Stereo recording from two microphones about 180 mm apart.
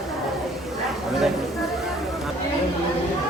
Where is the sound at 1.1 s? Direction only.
Centre (ahead or behind).